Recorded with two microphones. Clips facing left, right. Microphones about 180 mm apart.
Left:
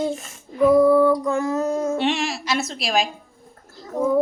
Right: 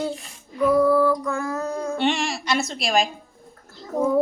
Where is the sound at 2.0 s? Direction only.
Centre (ahead or behind).